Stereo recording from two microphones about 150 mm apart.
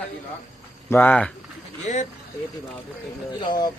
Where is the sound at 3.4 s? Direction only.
30° left (ahead or behind).